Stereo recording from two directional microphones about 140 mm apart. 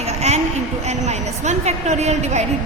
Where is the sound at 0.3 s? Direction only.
55° right (ahead or behind).